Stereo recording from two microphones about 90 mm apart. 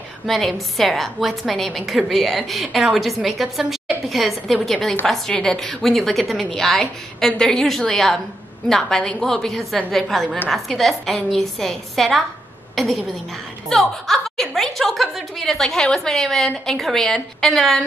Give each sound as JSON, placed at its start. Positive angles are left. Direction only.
{"t": 0.3, "sound": "a woman's voice", "side_deg": 0}